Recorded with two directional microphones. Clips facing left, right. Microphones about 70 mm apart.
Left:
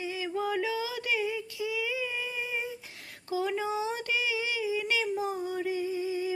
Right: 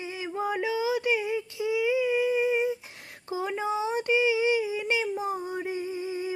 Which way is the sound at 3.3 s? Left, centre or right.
Right.